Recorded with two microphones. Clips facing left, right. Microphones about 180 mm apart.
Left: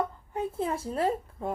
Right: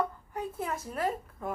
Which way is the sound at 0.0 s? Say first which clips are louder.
Left 2 dB; 25° left (ahead or behind).